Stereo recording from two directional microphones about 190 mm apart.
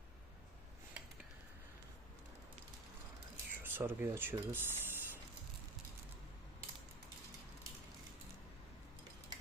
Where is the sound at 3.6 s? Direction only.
10° right (ahead or behind).